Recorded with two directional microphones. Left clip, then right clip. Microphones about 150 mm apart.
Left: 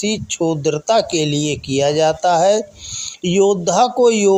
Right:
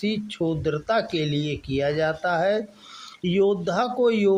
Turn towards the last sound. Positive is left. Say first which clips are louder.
# left 8 dB
turn(degrees=35)  # may be behind; listen again after turning